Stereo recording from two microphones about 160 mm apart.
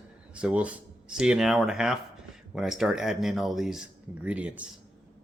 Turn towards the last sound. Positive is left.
turn(degrees=-10)  # may be behind; listen again after turning